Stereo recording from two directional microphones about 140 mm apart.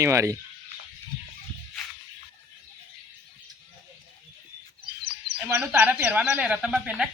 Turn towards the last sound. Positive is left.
turn(degrees=-5)  # may be behind; listen again after turning